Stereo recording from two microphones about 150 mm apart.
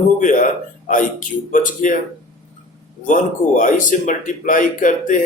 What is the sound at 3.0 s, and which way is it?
A man's voice, 60° left (ahead or behind).